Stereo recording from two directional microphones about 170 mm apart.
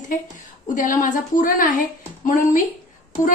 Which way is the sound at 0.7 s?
50° left (ahead or behind).